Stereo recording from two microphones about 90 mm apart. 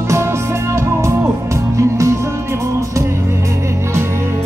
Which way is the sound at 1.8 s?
35° right (ahead or behind).